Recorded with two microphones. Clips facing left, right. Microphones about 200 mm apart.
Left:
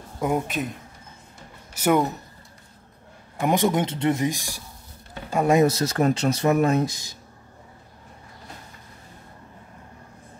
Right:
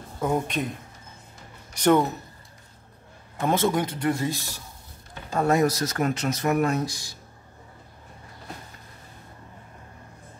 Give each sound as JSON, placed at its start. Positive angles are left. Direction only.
{"t": 0.2, "sound": "a man's voice", "side_deg": 5}
{"t": 1.7, "sound": "speech", "side_deg": 10}
{"t": 3.3, "sound": "a man's voice", "side_deg": 15}